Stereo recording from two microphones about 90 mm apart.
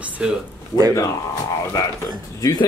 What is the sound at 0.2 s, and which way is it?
Speech, 10° right (ahead or behind).